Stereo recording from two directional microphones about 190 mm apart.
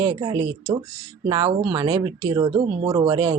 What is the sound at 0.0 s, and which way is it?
Speech, 25° right (ahead or behind).